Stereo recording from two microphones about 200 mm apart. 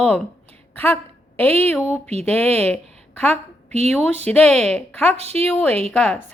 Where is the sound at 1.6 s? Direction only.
10° left (ahead or behind).